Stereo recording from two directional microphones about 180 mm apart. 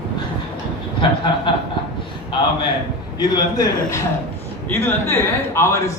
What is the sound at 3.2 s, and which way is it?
A man's voice, 25° left (ahead or behind).